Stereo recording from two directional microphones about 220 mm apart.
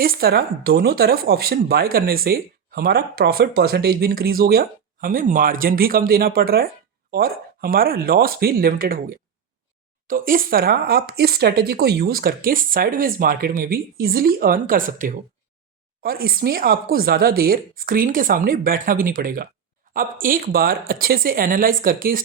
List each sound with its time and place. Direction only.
0.0 s speech: 40° right (ahead or behind)